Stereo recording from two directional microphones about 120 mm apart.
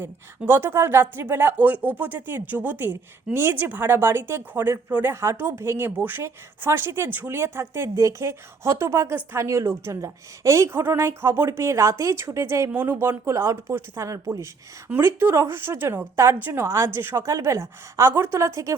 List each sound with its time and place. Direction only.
0.0 s speech: 20° right (ahead or behind)